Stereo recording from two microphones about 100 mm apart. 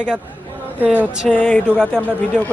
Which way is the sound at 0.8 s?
5° right (ahead or behind).